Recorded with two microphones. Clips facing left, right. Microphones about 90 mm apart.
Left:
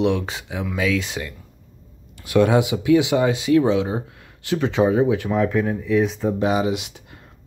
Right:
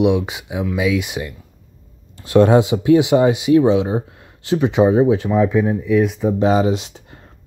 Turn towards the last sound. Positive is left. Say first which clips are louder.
# right 4 dB
turn(degrees=-30)  # may be behind; listen again after turning